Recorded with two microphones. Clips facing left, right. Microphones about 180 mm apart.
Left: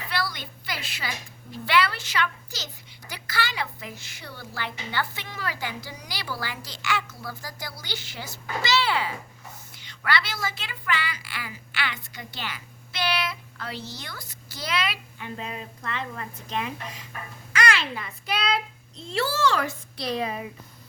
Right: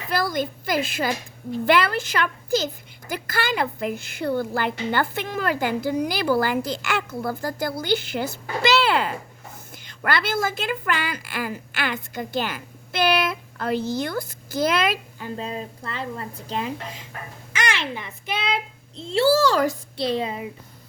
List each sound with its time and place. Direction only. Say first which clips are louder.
0.1 s a woman's voice: right 9 dB; 45° right (ahead or behind)
15.4 s a child's voice: right 6 dB; 30° right (ahead or behind)